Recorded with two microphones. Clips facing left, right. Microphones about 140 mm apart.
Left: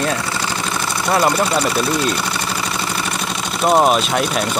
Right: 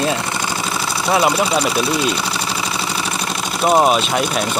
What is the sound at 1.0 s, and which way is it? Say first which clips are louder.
Speech: even; 5° right (ahead or behind).